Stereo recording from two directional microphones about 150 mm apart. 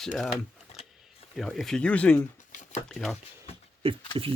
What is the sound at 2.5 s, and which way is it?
Shuffling cards, 60° left (ahead or behind).